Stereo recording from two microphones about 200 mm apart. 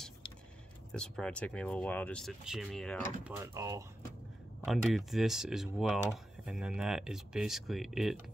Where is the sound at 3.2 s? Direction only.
15° right (ahead or behind).